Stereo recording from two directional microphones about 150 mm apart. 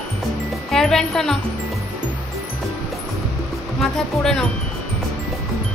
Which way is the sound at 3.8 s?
Centre (ahead or behind).